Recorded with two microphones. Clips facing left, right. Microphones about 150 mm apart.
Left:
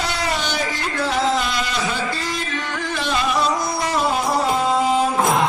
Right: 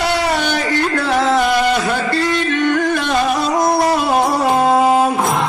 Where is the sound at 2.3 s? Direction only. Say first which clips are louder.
Right 11 dB; 75° right (ahead or behind).